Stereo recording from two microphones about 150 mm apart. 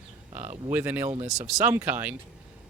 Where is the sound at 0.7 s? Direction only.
10° right (ahead or behind).